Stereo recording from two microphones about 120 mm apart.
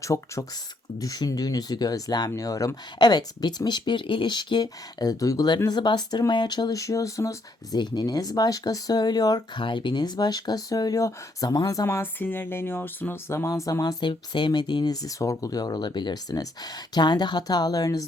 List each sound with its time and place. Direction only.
0.0 s speech: 25° left (ahead or behind)
14.0 s speech: 40° left (ahead or behind)